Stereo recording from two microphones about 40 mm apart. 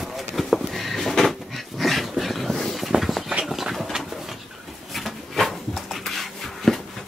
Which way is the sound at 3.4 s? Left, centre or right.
Centre.